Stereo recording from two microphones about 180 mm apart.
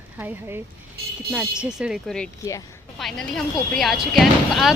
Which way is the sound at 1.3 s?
5° right (ahead or behind).